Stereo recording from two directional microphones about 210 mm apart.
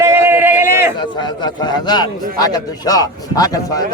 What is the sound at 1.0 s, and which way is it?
A man's voice, 20° left (ahead or behind).